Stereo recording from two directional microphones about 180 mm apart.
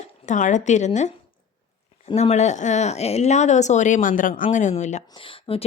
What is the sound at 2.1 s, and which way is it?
Speech, 40° left (ahead or behind).